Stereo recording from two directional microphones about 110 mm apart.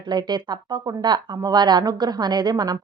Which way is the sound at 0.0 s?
40° right (ahead or behind).